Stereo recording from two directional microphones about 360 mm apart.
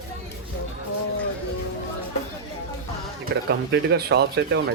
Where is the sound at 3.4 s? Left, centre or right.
Right.